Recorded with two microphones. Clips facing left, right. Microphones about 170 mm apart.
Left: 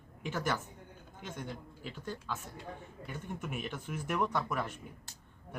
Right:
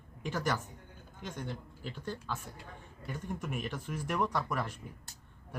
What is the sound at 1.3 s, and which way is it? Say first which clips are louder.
Speech: right 1 dB; 5° left (ahead or behind).